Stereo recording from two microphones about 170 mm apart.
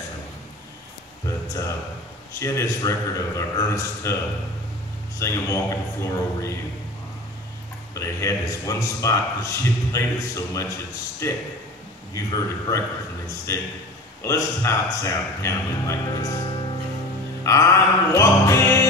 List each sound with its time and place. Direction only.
2.4 s a man's voice: 20° left (ahead or behind)
5.2 s a man's voice: 15° left (ahead or behind)
7.9 s a man's voice: 20° left (ahead or behind)
14.2 s a man's voice: 15° left (ahead or behind)